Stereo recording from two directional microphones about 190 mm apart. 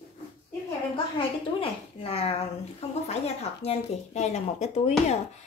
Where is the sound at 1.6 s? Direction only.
30° left (ahead or behind).